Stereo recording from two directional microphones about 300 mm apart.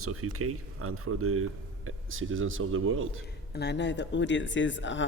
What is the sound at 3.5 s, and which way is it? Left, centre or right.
Speech, left.